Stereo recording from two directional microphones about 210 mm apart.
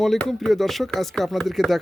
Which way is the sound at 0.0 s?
Centre (ahead or behind).